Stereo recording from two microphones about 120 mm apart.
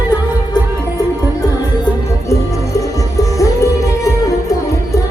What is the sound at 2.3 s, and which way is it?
Music, 25° left (ahead or behind).